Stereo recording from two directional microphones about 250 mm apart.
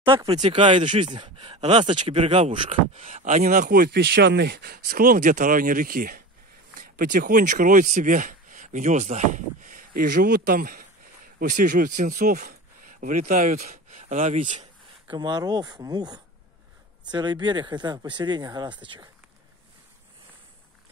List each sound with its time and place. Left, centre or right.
0.0 s speech: centre
14.6 s speech: centre